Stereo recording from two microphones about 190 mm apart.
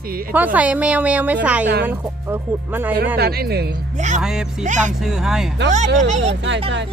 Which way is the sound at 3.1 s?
55° right (ahead or behind).